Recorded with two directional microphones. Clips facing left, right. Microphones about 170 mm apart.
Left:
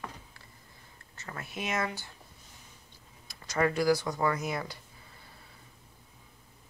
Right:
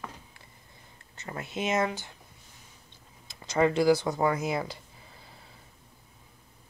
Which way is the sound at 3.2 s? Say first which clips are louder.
Right 4 dB; 25° right (ahead or behind).